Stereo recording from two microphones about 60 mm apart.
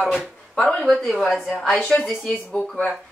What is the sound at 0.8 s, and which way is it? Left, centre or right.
Speech, centre.